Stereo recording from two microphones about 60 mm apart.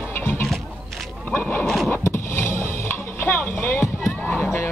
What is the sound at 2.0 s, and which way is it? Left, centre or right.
Vehicle, left.